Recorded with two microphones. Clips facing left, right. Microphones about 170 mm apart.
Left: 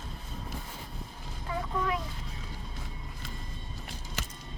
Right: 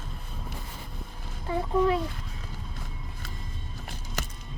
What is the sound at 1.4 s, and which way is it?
Speech, 30° right (ahead or behind).